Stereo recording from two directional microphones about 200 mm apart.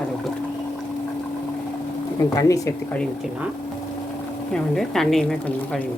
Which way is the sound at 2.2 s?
15° left (ahead or behind).